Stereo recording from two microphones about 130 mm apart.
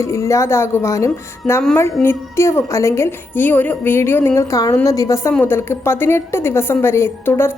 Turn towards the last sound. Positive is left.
turn(degrees=20)  # may be behind; listen again after turning